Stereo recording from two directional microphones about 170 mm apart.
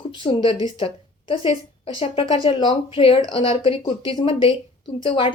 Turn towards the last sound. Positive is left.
turn(degrees=30)  # may be behind; listen again after turning